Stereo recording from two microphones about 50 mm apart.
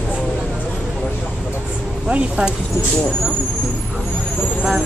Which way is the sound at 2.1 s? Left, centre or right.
Right.